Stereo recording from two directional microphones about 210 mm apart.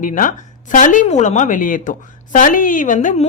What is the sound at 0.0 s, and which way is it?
A woman's voice, 40° left (ahead or behind).